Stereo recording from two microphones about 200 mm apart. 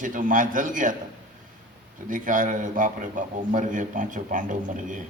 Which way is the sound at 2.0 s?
40° right (ahead or behind).